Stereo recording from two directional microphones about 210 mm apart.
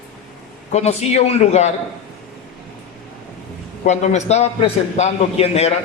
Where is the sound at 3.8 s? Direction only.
35° left (ahead or behind).